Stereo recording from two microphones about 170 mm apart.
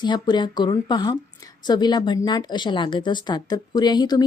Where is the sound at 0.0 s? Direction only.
25° left (ahead or behind).